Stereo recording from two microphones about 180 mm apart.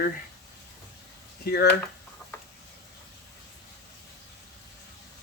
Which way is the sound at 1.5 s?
60° left (ahead or behind).